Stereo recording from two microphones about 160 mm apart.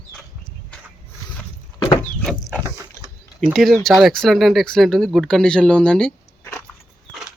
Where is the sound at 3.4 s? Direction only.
Centre (ahead or behind).